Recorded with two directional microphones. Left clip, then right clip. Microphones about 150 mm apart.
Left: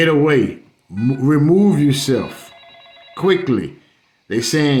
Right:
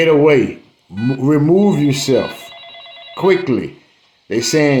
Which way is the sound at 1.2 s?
50° left (ahead or behind).